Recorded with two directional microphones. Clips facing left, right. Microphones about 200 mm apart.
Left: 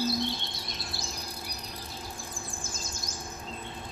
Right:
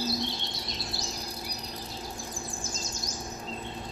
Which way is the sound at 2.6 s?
55° left (ahead or behind).